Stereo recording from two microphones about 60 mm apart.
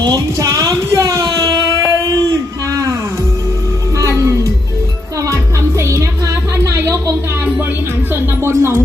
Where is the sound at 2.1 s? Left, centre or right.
Right.